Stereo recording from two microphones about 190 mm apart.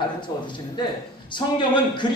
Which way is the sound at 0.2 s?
25° left (ahead or behind).